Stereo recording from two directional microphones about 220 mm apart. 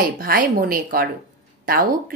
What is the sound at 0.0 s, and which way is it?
A woman's voice, 40° right (ahead or behind).